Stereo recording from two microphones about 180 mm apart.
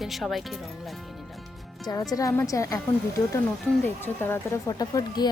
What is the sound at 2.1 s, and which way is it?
Speech, 20° left (ahead or behind).